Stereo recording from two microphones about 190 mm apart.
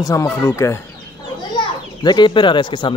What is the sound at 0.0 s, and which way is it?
Speech, 15° left (ahead or behind).